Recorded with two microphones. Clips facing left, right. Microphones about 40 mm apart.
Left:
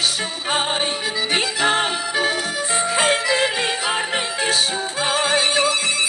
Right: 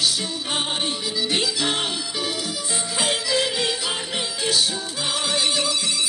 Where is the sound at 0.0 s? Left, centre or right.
Left.